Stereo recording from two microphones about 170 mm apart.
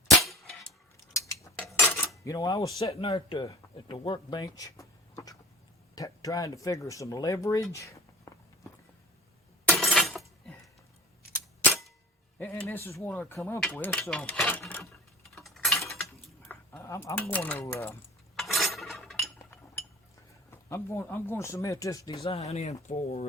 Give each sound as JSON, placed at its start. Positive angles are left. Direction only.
{"t": 0.2, "sound": "clang", "side_deg": 0}
{"t": 0.9, "sound": "cutlery", "side_deg": 20}
{"t": 2.2, "sound": "speech", "side_deg": 20}
{"t": 2.9, "sound": "speech", "side_deg": 30}
{"t": 9.6, "sound": "glass", "side_deg": 0}
{"t": 12.4, "sound": "speech", "side_deg": 15}
{"t": 14.0, "sound": "a sound", "side_deg": 10}
{"t": 16.5, "sound": "speech", "side_deg": 15}
{"t": 18.3, "sound": "cutlery", "side_deg": 0}
{"t": 18.9, "sound": "chink", "side_deg": 0}
{"t": 20.5, "sound": "speech", "side_deg": 15}
{"t": 22.4, "sound": "speech", "side_deg": 40}